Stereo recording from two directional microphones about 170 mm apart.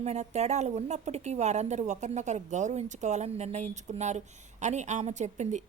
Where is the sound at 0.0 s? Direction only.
40° right (ahead or behind).